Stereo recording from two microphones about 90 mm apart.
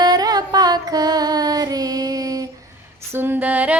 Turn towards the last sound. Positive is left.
turn(degrees=-20)  # may be behind; listen again after turning